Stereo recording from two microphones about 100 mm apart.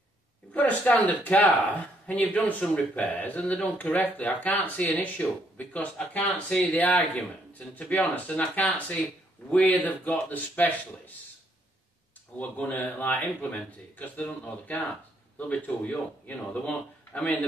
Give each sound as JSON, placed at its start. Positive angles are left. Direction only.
{"t": 0.6, "sound": "speech", "side_deg": 15}
{"t": 12.4, "sound": "speech", "side_deg": 15}
{"t": 15.3, "sound": "speech", "side_deg": 15}